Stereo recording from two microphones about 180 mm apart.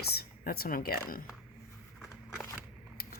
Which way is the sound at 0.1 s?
60° left (ahead or behind).